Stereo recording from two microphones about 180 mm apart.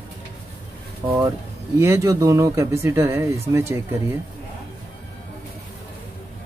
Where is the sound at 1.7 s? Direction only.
15° right (ahead or behind).